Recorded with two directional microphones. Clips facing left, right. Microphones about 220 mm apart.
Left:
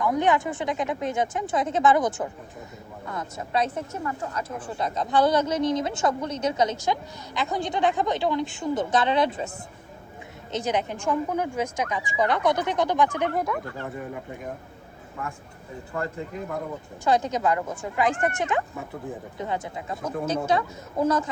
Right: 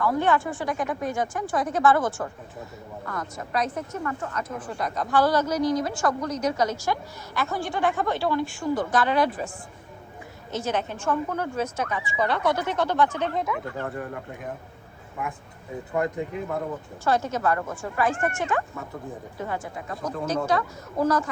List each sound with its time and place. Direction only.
0.0 s a woman's voice: 20° left (ahead or behind)
10.5 s speech: 15° left (ahead or behind)
13.3 s speech: centre (ahead or behind)
17.0 s a woman's voice: 15° left (ahead or behind)